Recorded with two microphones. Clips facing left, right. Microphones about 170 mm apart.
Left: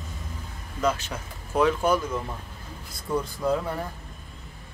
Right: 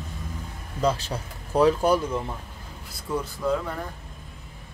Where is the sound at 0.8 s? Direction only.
35° right (ahead or behind).